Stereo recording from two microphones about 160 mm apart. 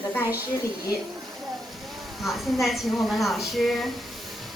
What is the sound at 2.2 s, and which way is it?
A woman's voice, centre (ahead or behind).